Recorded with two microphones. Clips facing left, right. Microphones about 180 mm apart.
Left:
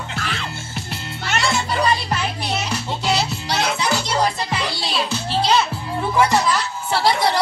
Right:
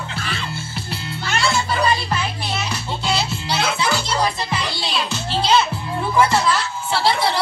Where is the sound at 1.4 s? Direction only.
20° left (ahead or behind).